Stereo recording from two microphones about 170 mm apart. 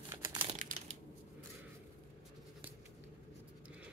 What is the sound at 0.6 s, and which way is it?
Crushing, 50° right (ahead or behind).